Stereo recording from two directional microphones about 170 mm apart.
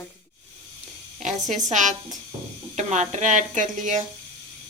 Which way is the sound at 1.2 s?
45° right (ahead or behind).